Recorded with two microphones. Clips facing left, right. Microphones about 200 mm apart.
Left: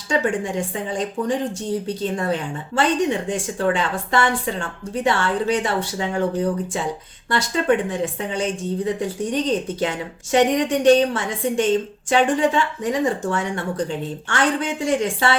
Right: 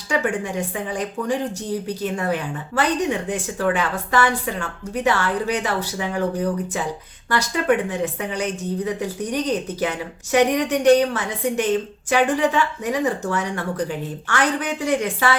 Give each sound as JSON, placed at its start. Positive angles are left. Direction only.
{"t": 0.1, "sound": "a woman's voice", "side_deg": 25}